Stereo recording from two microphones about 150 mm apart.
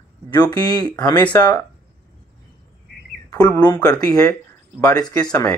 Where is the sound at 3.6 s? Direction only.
25° left (ahead or behind).